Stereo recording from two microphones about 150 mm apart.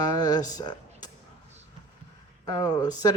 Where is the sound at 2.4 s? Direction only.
25° left (ahead or behind).